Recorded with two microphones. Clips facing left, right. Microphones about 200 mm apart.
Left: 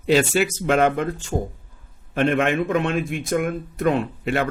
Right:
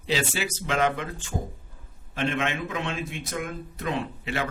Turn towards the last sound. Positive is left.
turn(degrees=55)  # may be behind; listen again after turning